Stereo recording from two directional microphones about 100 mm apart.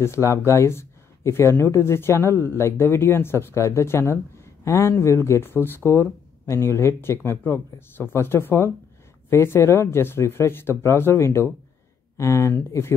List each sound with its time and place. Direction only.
0.0 s speech: 30° left (ahead or behind)